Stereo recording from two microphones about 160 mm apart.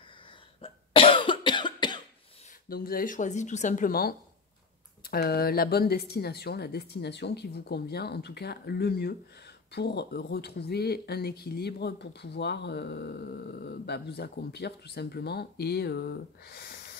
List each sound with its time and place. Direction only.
0.6 s cough: 35° left (ahead or behind)
2.7 s speech: 65° left (ahead or behind)